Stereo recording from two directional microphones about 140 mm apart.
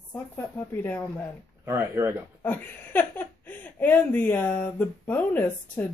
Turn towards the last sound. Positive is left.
turn(degrees=15)  # may be behind; listen again after turning